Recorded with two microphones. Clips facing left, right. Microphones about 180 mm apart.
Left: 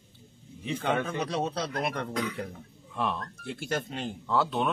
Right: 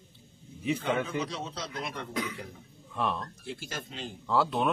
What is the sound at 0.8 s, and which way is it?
Speech, 60° left (ahead or behind).